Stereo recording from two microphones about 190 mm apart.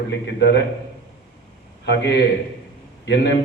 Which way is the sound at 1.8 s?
65° left (ahead or behind).